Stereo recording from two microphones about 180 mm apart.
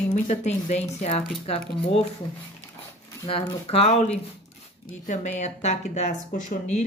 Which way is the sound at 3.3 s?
30° left (ahead or behind).